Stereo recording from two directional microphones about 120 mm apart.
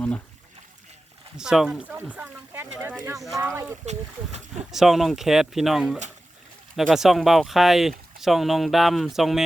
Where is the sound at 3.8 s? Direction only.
70° right (ahead or behind).